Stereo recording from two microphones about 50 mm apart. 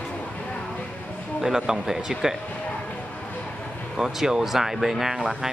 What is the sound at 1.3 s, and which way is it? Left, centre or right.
Speech, centre.